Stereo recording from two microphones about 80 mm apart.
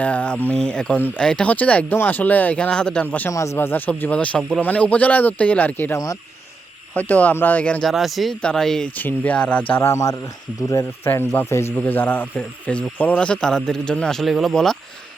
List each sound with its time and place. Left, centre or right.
0.0 s speech: centre
3.2 s speech: left
3.7 s speech: left
6.9 s speech: left
7.9 s speech: centre
9.0 s speech: centre
9.8 s speech: left
11.0 s speech: left
11.8 s speech: left; by 14.8 s centre